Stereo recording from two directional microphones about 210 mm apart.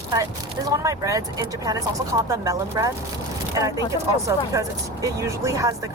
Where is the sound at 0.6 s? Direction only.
15° right (ahead or behind).